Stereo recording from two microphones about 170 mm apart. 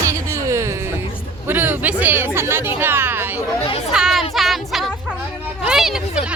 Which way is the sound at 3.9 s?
Centre (ahead or behind).